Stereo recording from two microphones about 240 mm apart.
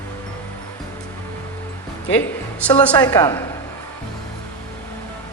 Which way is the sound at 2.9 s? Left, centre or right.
Centre.